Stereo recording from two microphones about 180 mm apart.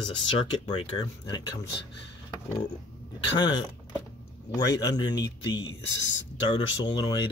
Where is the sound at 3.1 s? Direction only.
25° left (ahead or behind).